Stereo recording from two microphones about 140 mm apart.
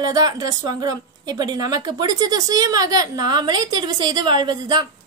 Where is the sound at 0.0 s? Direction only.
30° right (ahead or behind).